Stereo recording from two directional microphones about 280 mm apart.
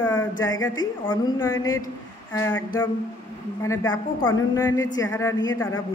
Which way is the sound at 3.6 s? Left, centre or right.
Centre.